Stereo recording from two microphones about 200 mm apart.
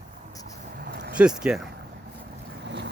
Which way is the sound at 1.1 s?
5° right (ahead or behind).